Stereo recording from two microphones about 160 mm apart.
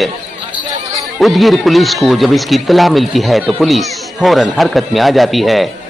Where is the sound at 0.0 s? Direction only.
10° right (ahead or behind).